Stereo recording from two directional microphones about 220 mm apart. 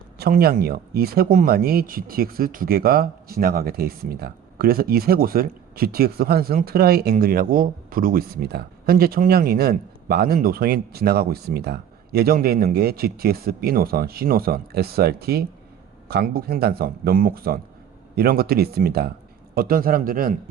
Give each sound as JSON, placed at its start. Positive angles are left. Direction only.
{"t": 0.2, "sound": "a man's voice", "side_deg": -45}